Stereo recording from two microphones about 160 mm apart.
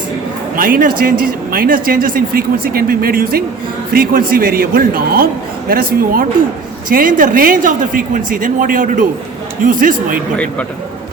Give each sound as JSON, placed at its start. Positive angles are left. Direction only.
{"t": 0.5, "sound": "a man's voice", "side_deg": -60}
{"t": 10.3, "sound": "a man's voice", "side_deg": 10}